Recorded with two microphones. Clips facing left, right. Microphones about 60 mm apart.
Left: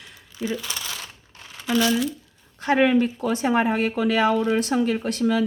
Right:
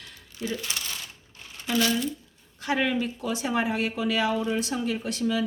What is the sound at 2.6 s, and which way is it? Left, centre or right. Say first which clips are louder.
Speech: left 7 dB; left.